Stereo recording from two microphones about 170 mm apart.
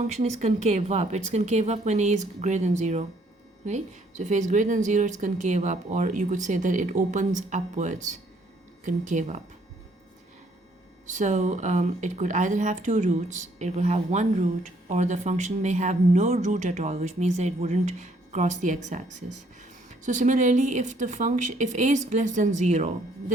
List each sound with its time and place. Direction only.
0.1 s speech: 40° right (ahead or behind)
11.0 s speech: 45° right (ahead or behind)